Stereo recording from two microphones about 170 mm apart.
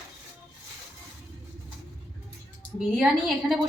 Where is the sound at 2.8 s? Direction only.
Centre (ahead or behind).